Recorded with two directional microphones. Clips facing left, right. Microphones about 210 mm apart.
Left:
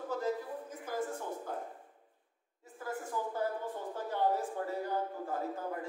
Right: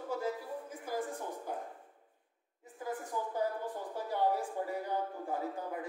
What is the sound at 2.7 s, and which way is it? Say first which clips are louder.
A woman's voice: even; 15° right (ahead or behind).